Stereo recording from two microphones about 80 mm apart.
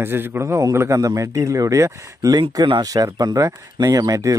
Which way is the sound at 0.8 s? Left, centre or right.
Right.